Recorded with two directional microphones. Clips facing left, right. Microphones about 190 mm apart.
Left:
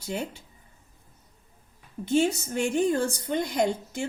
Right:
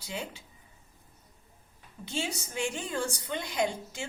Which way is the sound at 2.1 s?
50° left (ahead or behind).